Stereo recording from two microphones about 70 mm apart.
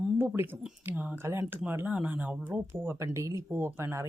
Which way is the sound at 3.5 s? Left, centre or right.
Right.